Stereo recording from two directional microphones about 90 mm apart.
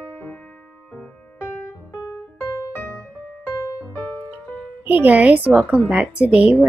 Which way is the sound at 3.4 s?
35° left (ahead or behind).